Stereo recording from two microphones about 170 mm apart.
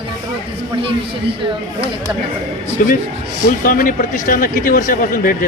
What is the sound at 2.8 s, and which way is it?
Speech, 55° left (ahead or behind).